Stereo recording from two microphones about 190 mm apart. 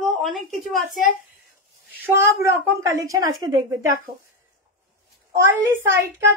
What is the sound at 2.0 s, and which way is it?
A woman's voice, 15° right (ahead or behind).